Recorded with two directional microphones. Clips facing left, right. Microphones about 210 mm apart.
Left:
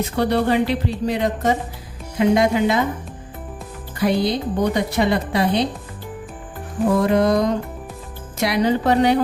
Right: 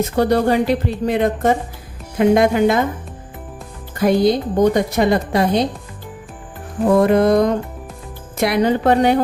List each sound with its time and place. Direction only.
0.0 s a woman's voice: 45° right (ahead or behind)
3.9 s a woman's voice: 45° right (ahead or behind)
7.0 s music: 55° right (ahead or behind)
8.4 s a woman's voice: 55° right (ahead or behind)